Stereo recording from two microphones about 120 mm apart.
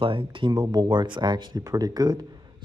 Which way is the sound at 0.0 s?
45° right (ahead or behind).